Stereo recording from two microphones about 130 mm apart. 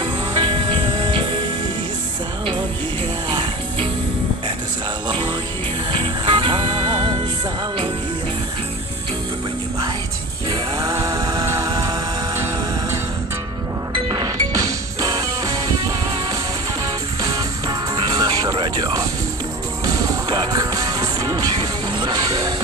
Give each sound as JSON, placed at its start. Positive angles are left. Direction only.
{"t": 0.0, "sound": "music", "side_deg": -40}
{"t": 3.2, "sound": "music", "side_deg": -35}
{"t": 5.0, "sound": "music", "side_deg": -35}
{"t": 10.5, "sound": "music", "side_deg": -30}
{"t": 13.9, "sound": "music", "side_deg": -30}